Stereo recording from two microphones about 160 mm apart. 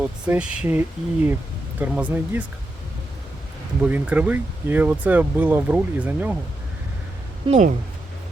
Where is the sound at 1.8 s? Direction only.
10° right (ahead or behind).